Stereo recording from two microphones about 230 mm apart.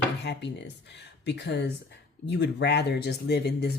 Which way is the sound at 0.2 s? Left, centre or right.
Left.